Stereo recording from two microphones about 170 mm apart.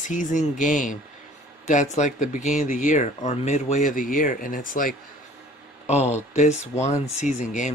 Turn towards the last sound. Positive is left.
turn(degrees=45)  # may be behind; listen again after turning